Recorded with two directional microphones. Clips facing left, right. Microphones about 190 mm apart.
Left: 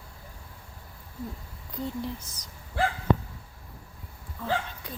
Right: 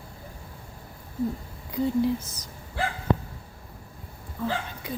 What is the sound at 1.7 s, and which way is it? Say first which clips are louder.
Speech: right 9 dB; 5° right (ahead or behind).